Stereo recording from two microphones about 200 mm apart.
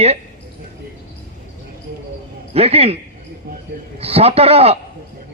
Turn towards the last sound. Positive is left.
turn(degrees=-30)  # may be behind; listen again after turning